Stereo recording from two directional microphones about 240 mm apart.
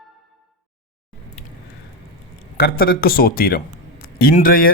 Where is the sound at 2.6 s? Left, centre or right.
Left.